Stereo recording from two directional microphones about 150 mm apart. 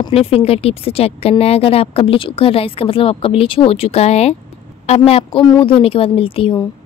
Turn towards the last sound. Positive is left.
turn(degrees=40)  # may be behind; listen again after turning